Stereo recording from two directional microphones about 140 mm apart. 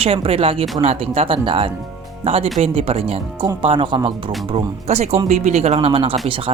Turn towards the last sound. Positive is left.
turn(degrees=-40)  # may be behind; listen again after turning